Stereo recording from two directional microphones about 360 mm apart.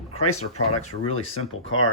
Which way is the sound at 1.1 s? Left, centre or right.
Left.